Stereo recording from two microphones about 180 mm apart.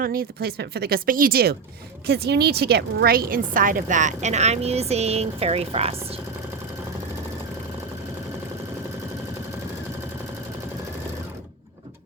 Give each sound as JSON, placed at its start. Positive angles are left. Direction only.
{"t": 0.0, "sound": "a woman's voice", "side_deg": -55}